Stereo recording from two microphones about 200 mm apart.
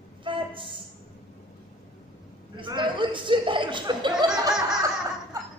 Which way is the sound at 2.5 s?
25° right (ahead or behind).